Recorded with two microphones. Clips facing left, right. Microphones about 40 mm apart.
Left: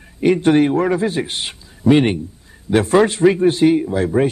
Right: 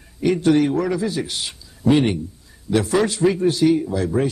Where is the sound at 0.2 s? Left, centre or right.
Left.